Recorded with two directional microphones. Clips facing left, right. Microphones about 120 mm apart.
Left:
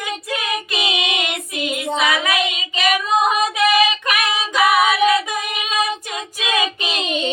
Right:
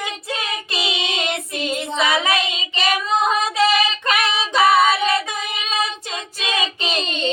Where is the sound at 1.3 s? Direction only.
30° right (ahead or behind).